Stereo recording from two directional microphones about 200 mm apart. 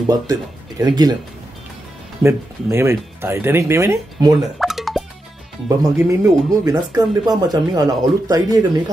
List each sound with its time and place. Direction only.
0.1 s speech: 20° right (ahead or behind)
2.2 s speech: 15° right (ahead or behind)
4.4 s plop: centre (ahead or behind)
5.7 s speech: 15° right (ahead or behind)